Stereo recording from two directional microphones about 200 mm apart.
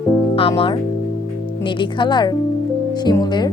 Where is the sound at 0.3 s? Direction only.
25° left (ahead or behind).